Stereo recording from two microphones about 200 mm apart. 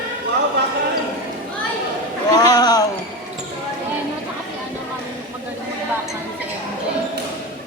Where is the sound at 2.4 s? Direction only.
20° left (ahead or behind).